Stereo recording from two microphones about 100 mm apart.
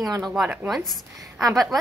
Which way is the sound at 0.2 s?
5° right (ahead or behind).